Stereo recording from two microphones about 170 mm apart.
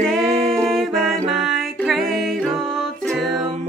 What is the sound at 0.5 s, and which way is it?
Music, centre (ahead or behind).